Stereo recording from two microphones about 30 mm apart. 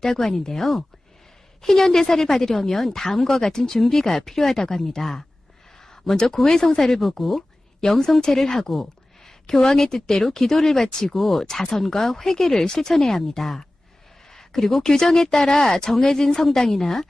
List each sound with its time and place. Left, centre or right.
0.0 s a woman's voice: centre
7.2 s speech: centre
7.8 s a woman's voice: centre
11.1 s speech: centre
11.4 s speech: left
11.7 s a woman's voice: centre
12.9 s a woman's voice: centre
14.3 s a sound: centre
14.8 s a woman's voice: centre